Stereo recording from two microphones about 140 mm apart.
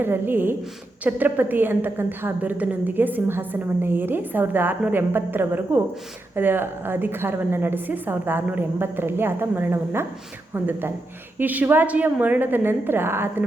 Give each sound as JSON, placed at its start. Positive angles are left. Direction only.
{"t": 0.0, "sound": "a woman's voice", "side_deg": -15}